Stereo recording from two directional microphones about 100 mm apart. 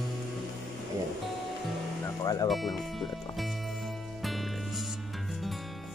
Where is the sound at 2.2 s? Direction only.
35° left (ahead or behind).